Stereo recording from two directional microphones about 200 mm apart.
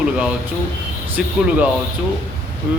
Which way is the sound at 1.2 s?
5° right (ahead or behind).